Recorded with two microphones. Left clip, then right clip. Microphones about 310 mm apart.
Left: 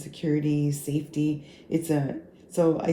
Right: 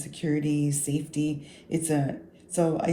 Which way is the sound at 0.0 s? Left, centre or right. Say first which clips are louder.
Left 1 dB; right.